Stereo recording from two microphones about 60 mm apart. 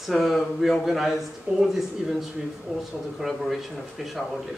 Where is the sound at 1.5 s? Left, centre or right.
Right.